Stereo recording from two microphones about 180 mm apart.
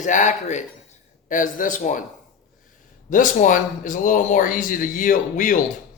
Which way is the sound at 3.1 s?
45° left (ahead or behind).